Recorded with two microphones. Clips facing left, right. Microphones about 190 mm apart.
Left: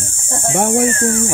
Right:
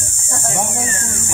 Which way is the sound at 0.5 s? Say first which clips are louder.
Left 11 dB; 75° left (ahead or behind).